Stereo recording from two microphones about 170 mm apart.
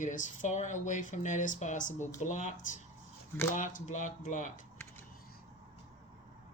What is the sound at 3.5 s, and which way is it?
Speech, 50° left (ahead or behind).